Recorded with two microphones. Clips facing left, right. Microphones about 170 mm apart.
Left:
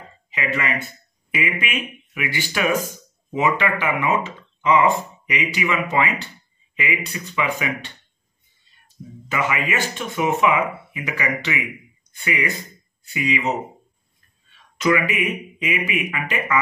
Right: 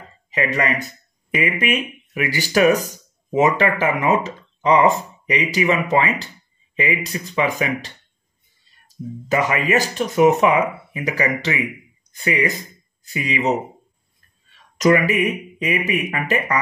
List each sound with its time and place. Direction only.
0.3 s speech: 40° right (ahead or behind)
14.8 s speech: 40° right (ahead or behind)